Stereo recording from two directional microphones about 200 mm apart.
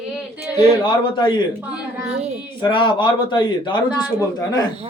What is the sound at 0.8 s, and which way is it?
Speech, 25° left (ahead or behind).